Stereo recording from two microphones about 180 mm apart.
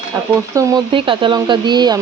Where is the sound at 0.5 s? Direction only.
25° right (ahead or behind).